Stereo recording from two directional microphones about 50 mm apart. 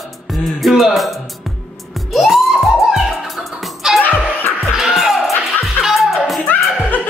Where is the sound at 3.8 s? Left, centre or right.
Centre.